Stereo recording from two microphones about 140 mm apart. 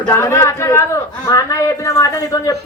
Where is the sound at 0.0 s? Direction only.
20° left (ahead or behind).